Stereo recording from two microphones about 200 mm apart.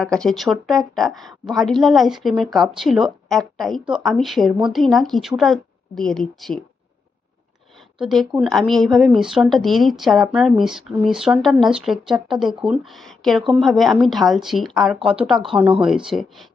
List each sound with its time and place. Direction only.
0.0 s a woman's voice: 5° left (ahead or behind)
7.9 s a woman's voice: centre (ahead or behind)